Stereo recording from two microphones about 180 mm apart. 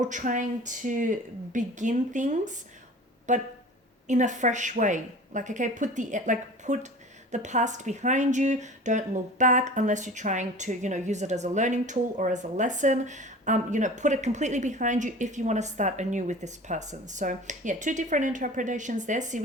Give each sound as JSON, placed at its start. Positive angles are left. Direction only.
{"t": 0.0, "sound": "a woman's voice", "side_deg": -45}